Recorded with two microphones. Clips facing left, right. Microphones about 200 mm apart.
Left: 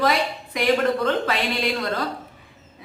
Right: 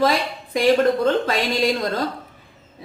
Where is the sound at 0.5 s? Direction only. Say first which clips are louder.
Right 4 dB; 30° right (ahead or behind).